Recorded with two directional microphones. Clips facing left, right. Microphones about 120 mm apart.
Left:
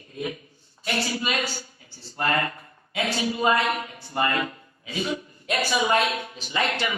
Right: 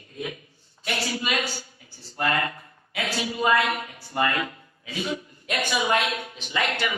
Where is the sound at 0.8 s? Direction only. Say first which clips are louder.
Left 1 dB; 35° left (ahead or behind).